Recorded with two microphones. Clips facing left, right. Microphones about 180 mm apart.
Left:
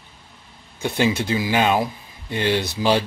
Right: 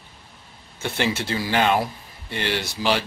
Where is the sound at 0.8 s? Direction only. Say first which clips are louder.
Left 4 dB; 15° left (ahead or behind).